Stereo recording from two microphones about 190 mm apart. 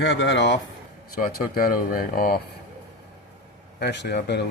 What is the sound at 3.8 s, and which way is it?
Speech, 60° left (ahead or behind).